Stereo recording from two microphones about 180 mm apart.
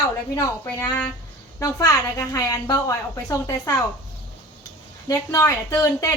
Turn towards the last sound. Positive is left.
turn(degrees=20)  # may be behind; listen again after turning